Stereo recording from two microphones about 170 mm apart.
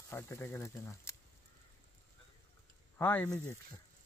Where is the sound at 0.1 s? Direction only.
15° left (ahead or behind).